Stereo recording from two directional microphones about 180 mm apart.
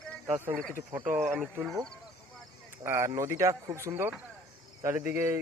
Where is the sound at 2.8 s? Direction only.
15° right (ahead or behind).